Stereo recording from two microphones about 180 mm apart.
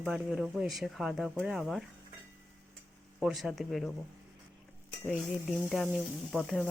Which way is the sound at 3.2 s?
Centre (ahead or behind).